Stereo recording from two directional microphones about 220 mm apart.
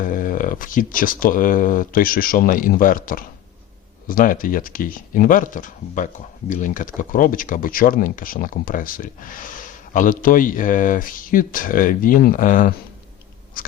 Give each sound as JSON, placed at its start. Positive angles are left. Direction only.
{"t": 0.0, "sound": "speech", "side_deg": 40}